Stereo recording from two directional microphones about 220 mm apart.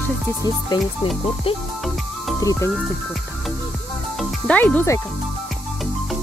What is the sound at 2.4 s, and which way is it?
Speech, 15° left (ahead or behind).